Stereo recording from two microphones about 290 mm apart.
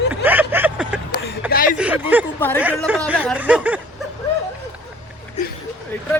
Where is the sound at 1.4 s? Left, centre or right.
Centre.